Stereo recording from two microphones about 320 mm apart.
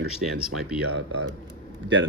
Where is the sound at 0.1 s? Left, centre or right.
Centre.